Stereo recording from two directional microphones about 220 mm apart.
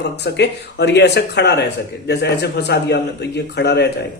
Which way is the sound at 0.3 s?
50° left (ahead or behind).